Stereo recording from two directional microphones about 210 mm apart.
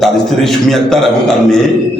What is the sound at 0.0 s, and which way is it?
Speech, centre (ahead or behind).